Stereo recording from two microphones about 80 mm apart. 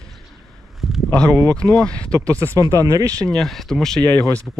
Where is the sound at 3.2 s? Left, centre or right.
Centre.